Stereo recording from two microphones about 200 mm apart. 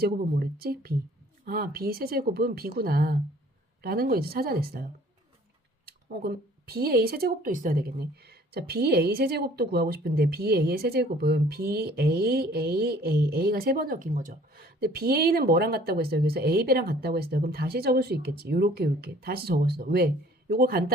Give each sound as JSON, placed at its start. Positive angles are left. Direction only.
{"t": 0.6, "sound": "speech", "side_deg": -50}